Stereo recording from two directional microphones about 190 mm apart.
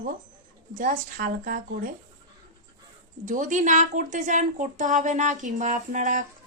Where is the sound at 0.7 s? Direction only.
45° right (ahead or behind).